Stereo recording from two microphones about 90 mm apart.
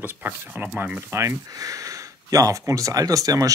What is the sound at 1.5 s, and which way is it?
Speech, 40° right (ahead or behind).